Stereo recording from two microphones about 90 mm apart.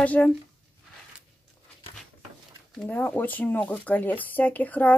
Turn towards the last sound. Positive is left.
turn(degrees=20)  # may be behind; listen again after turning